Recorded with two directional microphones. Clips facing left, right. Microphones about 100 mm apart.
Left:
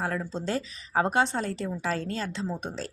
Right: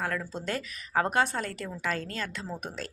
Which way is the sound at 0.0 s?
30° left (ahead or behind).